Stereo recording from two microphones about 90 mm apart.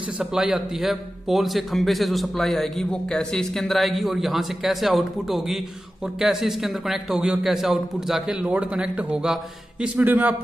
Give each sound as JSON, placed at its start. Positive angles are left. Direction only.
{"t": 0.2, "sound": "a man's voice", "side_deg": -5}
{"t": 9.9, "sound": "speech", "side_deg": -20}